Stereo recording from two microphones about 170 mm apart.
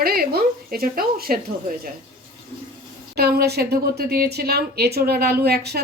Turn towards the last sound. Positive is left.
turn(degrees=-70)  # may be behind; listen again after turning